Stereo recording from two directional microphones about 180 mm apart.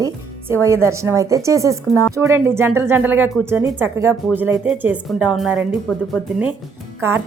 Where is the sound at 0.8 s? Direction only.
15° right (ahead or behind).